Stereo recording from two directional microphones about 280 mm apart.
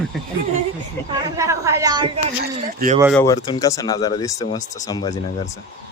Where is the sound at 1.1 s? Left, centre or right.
Centre.